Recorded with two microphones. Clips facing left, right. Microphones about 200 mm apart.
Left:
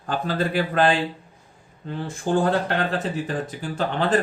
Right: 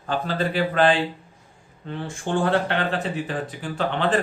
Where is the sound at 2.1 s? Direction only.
35° left (ahead or behind).